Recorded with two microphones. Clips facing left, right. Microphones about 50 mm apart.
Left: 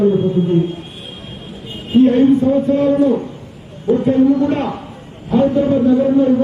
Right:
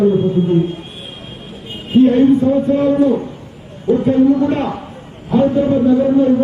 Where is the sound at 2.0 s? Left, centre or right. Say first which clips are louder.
Right 1 dB; centre.